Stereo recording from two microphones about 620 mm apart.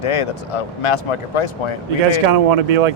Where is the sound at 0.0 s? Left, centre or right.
Left.